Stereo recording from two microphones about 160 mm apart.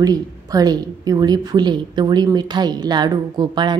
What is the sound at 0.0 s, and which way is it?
A woman's voice, 25° right (ahead or behind).